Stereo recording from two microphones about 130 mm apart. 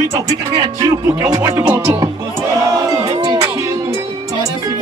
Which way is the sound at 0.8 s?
30° right (ahead or behind).